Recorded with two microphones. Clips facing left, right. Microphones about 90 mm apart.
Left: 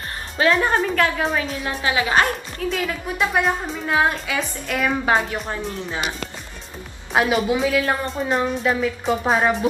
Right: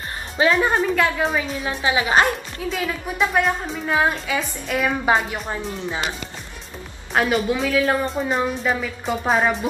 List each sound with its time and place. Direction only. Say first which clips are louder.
0.5 s a woman's voice: left 1 dB; centre (ahead or behind)
1.8 s a woman's voice: right 1 dB; 25° right (ahead or behind)
2.7 s a woman's voice: right 1 dB; centre (ahead or behind)
7.2 s a woman's voice: left 1 dB; 5° left (ahead or behind)